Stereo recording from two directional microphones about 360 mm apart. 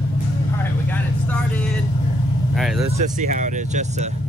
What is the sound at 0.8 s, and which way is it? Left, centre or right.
Vehicle, centre.